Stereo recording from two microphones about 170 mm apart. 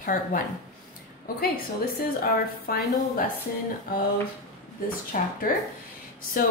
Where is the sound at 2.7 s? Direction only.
60° left (ahead or behind).